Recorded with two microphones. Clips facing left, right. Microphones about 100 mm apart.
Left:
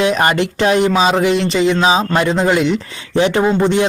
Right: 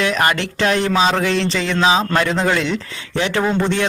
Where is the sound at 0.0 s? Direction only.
20° left (ahead or behind).